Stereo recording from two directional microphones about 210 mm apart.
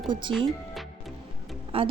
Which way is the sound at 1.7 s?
25° right (ahead or behind).